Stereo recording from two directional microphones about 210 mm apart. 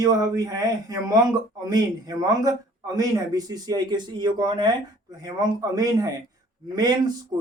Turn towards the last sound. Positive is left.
turn(degrees=-20)  # may be behind; listen again after turning